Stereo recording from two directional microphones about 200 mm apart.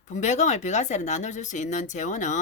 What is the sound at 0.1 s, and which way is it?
Speech, 35° left (ahead or behind).